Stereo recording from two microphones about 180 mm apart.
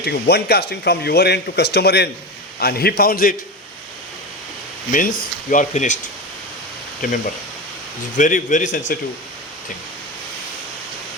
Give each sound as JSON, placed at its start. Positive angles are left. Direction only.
{"t": 0.0, "sound": "speech", "side_deg": 65}
{"t": 4.9, "sound": "speech", "side_deg": 50}
{"t": 7.0, "sound": "speech", "side_deg": 50}